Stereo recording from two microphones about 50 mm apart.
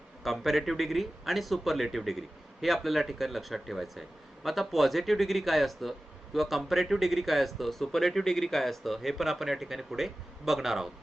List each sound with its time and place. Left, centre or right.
0.2 s speech: centre